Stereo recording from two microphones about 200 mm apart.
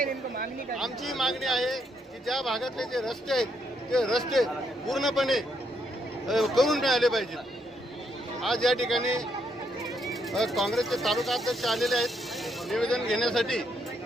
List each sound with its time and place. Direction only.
0.0 s a woman's voice: 45° right (ahead or behind)
0.8 s speech: centre (ahead or behind)
8.4 s speech: centre (ahead or behind)